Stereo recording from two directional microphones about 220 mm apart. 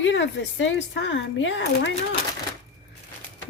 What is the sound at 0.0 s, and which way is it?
Speech, 60° left (ahead or behind).